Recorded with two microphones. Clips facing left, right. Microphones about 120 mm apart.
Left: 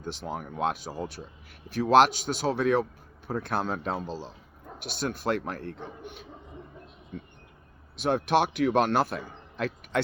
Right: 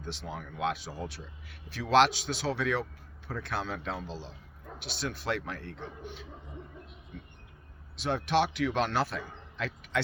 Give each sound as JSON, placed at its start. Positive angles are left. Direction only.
{"t": 0.0, "sound": "speech", "side_deg": 45}